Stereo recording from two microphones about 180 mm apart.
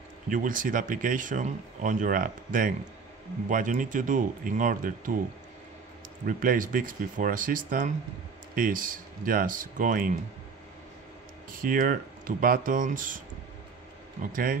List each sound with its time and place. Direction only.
0.3 s speech: 50° right (ahead or behind)
6.2 s speech: 50° right (ahead or behind)
11.5 s speech: 50° right (ahead or behind)
14.2 s speech: 50° right (ahead or behind)